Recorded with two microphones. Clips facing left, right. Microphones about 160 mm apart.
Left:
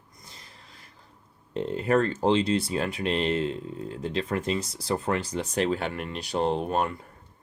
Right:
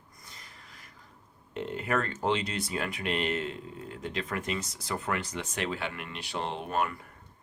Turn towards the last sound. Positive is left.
turn(degrees=30)  # may be behind; listen again after turning